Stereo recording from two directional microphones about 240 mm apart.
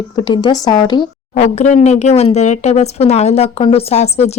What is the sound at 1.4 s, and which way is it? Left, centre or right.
A woman's voice, left.